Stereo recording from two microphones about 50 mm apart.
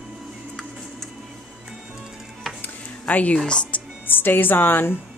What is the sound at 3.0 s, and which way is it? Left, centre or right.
Speech, left.